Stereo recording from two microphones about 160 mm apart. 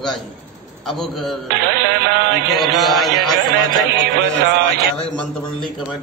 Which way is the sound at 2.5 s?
Centre (ahead or behind).